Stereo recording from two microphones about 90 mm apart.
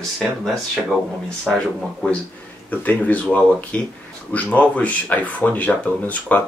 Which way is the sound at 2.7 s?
15° left (ahead or behind).